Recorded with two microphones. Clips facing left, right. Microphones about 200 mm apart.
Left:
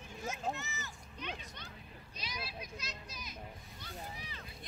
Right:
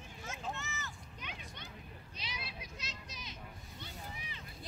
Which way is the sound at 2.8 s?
25° right (ahead or behind).